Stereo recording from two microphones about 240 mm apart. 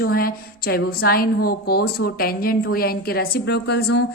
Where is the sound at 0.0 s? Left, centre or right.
Left.